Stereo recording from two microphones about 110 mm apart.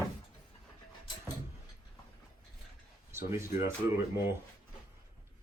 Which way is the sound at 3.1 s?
25° right (ahead or behind).